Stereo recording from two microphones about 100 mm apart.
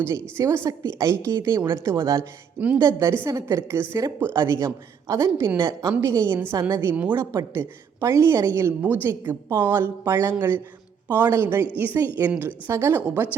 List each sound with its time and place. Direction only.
0.0 s a woman's voice: 30° right (ahead or behind)
2.6 s speech: 15° right (ahead or behind)
2.8 s a woman's voice: 30° right (ahead or behind)
8.8 s a woman's voice: 20° right (ahead or behind)